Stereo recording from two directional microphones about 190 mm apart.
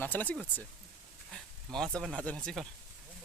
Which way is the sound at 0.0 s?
10° left (ahead or behind).